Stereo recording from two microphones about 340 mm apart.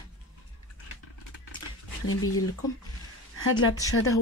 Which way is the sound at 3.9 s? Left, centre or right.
Left.